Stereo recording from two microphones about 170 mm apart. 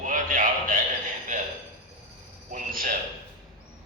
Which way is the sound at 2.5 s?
55° right (ahead or behind).